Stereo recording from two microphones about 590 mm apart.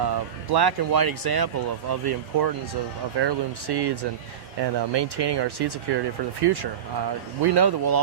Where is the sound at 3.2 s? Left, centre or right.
Right.